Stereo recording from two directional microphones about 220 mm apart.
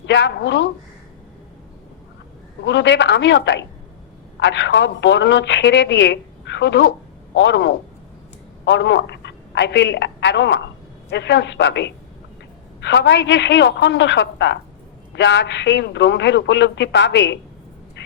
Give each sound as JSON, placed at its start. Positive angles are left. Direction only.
{"t": 0.0, "sound": "a woman's voice", "side_deg": 55}
{"t": 2.6, "sound": "a woman's voice", "side_deg": 55}